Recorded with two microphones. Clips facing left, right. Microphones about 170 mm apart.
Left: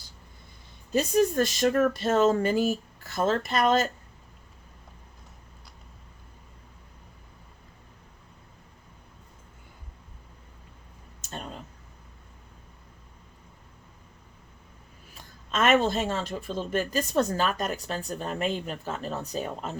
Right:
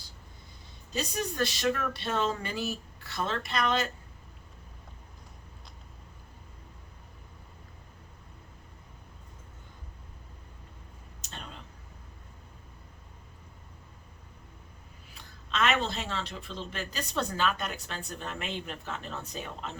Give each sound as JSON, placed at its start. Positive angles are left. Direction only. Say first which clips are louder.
{"t": 0.9, "sound": "speech", "louder": "left 9 dB", "side_deg": 45}
{"t": 11.2, "sound": "a sound", "louder": "left 7 dB", "side_deg": 45}
{"t": 15.1, "sound": "speech", "louder": "left 4 dB", "side_deg": 50}